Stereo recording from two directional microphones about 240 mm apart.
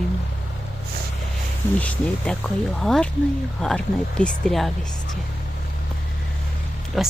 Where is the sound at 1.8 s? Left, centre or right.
Centre.